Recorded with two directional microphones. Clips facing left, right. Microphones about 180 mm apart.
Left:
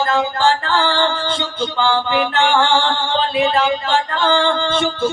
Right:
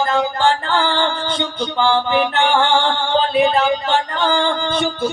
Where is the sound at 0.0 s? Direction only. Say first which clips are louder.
Even; 20° right (ahead or behind).